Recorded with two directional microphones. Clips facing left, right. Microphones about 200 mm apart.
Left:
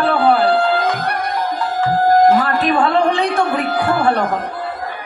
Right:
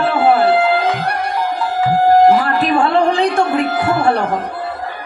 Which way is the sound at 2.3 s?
30° right (ahead or behind).